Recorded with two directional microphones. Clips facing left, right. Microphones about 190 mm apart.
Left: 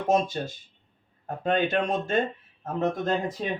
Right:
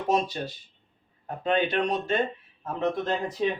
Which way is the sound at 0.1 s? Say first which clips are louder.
Left 2 dB; 45° left (ahead or behind).